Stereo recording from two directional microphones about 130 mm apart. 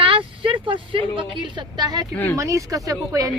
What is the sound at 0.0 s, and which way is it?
Speech, 40° right (ahead or behind).